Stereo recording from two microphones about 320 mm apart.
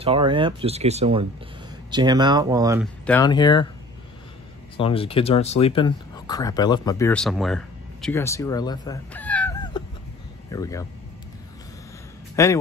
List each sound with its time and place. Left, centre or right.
0.0 s speech: centre
3.1 s speech: centre
4.7 s speech: centre
12.4 s speech: centre